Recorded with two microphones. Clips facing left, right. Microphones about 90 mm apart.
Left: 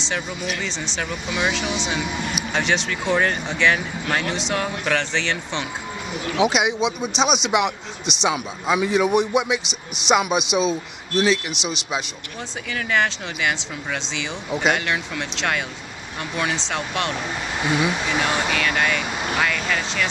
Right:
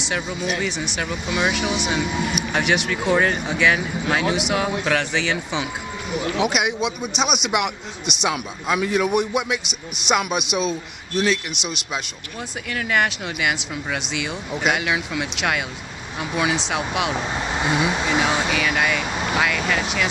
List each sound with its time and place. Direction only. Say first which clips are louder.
0.0 s speech: right 2 dB; 5° right (ahead or behind)